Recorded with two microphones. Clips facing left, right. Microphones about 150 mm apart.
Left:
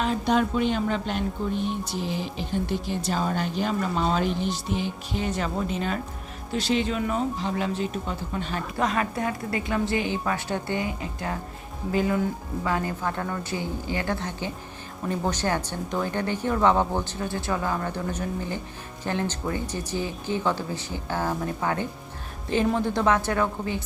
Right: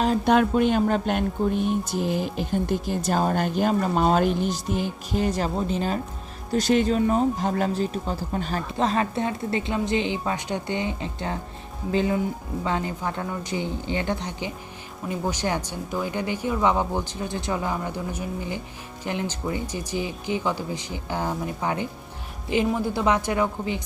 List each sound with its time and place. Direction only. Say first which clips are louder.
0.3 s speech: right 3 dB; 55° right (ahead or behind); by 6.0 s 35° right (ahead or behind)
6.5 s a woman's voice: right 5 dB; 45° right (ahead or behind); by 23.8 s 15° right (ahead or behind)